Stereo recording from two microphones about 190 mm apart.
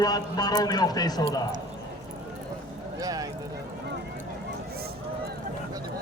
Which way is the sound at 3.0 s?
20° right (ahead or behind).